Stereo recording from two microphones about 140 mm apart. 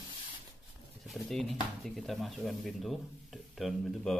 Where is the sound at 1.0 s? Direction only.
Centre (ahead or behind).